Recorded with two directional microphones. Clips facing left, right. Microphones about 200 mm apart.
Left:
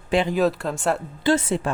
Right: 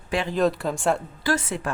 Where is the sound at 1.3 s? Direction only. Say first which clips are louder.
Left 5 dB; 25° left (ahead or behind).